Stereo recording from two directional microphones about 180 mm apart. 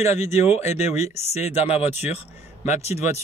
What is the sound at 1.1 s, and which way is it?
A man's voice, 35° left (ahead or behind).